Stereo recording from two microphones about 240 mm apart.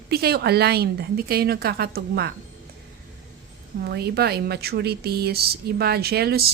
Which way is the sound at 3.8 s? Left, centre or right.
Right.